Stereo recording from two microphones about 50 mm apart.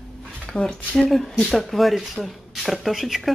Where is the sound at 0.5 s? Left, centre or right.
Centre.